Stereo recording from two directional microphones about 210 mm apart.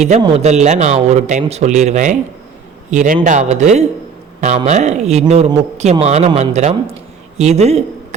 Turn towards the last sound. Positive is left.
turn(degrees=-30)  # may be behind; listen again after turning